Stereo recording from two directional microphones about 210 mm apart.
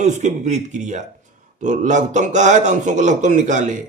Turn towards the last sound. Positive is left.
turn(degrees=-35)  # may be behind; listen again after turning